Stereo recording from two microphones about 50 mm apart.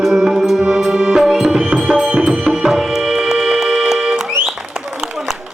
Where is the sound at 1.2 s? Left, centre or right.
Centre.